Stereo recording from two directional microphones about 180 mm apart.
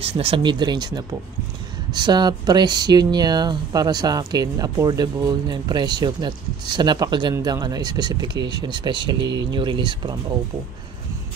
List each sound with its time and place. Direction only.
0.0 s speech: 30° right (ahead or behind)